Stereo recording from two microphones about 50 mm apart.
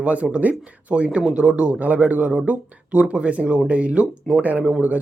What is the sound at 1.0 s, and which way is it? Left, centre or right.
Speech, right.